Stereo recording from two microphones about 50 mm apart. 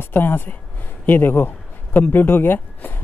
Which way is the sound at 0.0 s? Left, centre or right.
Left.